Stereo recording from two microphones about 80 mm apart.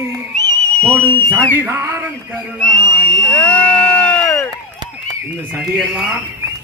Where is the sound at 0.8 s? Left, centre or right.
Centre.